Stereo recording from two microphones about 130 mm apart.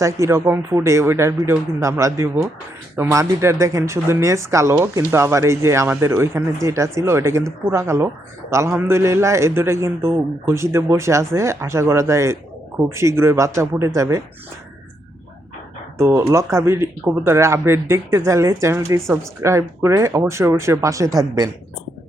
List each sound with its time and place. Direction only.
0.0 s speech: 25° right (ahead or behind)
16.0 s speech: 20° right (ahead or behind)